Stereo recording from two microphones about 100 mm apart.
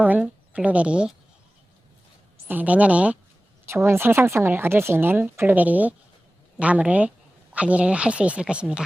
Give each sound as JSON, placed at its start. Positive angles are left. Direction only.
{"t": 0.0, "sound": "a woman's voice", "side_deg": -15}
{"t": 2.5, "sound": "speech", "side_deg": -15}
{"t": 3.7, "sound": "speech", "side_deg": -25}